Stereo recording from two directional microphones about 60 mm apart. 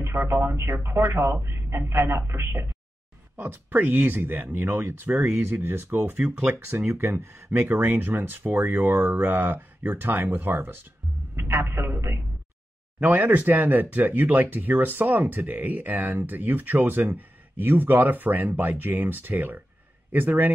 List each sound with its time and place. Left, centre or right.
0.0 s speech: right
3.3 s speech: right
7.6 s speech: right
11.3 s speech: right
13.0 s speech: right